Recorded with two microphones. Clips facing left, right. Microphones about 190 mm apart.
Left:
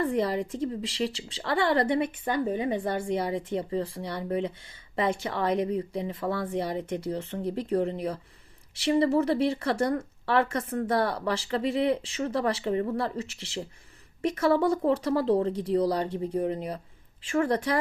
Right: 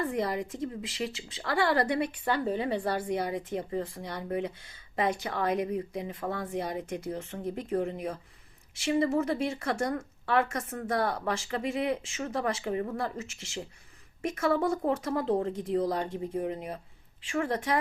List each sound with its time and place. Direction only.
0.0 s speech: 30° left (ahead or behind)